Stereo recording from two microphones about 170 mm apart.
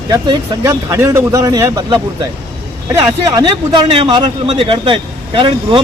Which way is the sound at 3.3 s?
30° right (ahead or behind).